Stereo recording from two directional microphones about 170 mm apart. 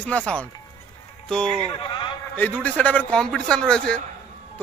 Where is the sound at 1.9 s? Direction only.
25° left (ahead or behind).